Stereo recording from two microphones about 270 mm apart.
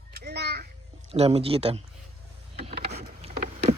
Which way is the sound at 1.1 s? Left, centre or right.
Right.